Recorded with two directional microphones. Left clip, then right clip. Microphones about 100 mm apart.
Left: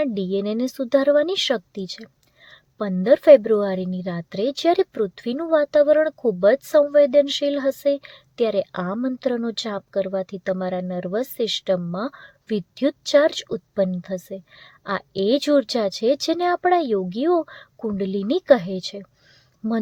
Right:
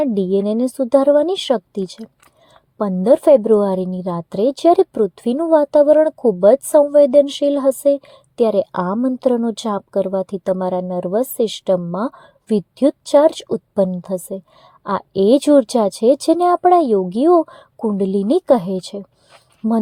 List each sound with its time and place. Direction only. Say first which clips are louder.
0.0 s a woman's voice: right 6 dB; 30° right (ahead or behind)
1.7 s a woman's voice: right 7 dB; 30° right (ahead or behind)
8.9 s a woman's voice: right 7 dB; 10° left (ahead or behind)
9.6 s a woman's voice: right 5 dB; 35° right (ahead or behind)
11.9 s a woman's voice: right 6 dB; 10° left (ahead or behind)
12.5 s a woman's voice: right 7 dB; 25° right (ahead or behind)
19.6 s speech: right 6 dB; 25° left (ahead or behind)